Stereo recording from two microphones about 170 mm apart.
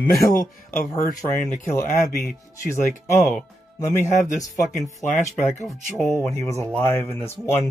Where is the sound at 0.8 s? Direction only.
55° left (ahead or behind).